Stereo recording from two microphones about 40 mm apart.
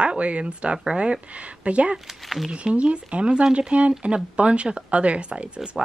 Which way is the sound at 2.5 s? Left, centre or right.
Right.